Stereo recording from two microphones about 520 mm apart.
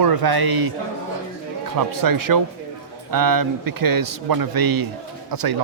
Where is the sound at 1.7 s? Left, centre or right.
Right.